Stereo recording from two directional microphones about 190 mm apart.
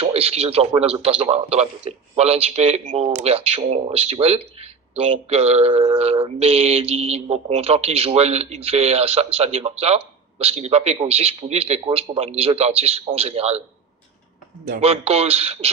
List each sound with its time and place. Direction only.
0.0 s speech: 30° right (ahead or behind)
14.6 s speech: 35° right (ahead or behind)